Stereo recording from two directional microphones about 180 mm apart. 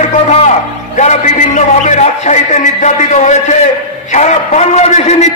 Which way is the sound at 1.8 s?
40° left (ahead or behind).